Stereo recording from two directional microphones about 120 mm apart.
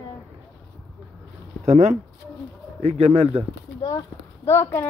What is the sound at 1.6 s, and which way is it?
Speech, 75° right (ahead or behind).